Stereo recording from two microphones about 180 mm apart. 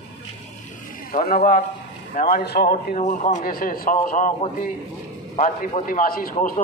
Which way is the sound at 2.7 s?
40° left (ahead or behind).